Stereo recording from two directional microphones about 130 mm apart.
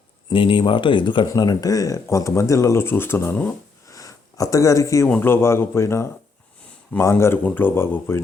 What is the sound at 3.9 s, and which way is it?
Sniff, 25° left (ahead or behind).